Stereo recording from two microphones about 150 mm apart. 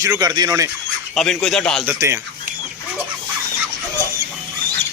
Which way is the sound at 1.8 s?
15° right (ahead or behind).